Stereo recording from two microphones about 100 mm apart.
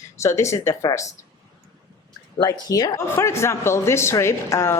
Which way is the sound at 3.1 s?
25° left (ahead or behind).